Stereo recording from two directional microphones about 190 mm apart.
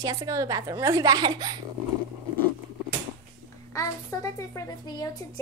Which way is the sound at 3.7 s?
15° left (ahead or behind).